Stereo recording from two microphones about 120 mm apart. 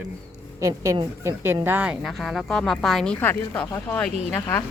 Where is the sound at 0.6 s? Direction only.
25° right (ahead or behind).